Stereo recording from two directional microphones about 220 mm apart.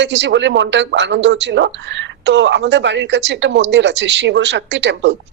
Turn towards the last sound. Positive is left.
turn(degrees=-55)  # may be behind; listen again after turning